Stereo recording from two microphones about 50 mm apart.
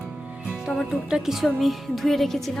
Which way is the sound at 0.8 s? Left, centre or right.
Centre.